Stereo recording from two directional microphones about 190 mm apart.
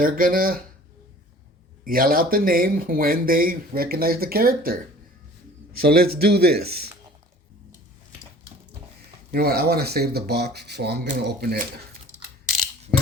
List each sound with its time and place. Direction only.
0.0 s speech: 50° right (ahead or behind)
1.8 s speech: 50° right (ahead or behind)
5.8 s speech: 55° right (ahead or behind)
9.3 s speech: 55° right (ahead or behind)